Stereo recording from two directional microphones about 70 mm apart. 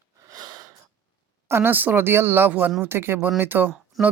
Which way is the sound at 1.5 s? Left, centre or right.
Right.